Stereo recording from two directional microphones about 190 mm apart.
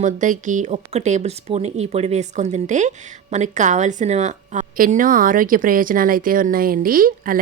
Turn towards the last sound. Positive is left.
turn(degrees=-50)  # may be behind; listen again after turning